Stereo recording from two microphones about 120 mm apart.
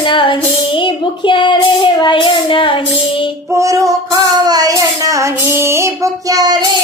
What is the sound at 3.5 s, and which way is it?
Child singing, 25° right (ahead or behind).